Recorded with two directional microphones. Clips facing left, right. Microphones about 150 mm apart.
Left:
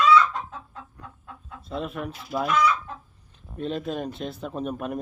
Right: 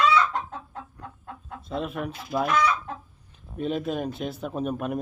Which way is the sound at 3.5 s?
5° right (ahead or behind).